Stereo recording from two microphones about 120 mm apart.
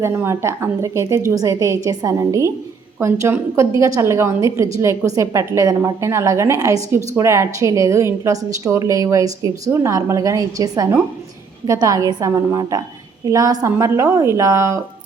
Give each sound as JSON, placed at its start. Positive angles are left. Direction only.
{"t": 0.0, "sound": "a woman's voice", "side_deg": -20}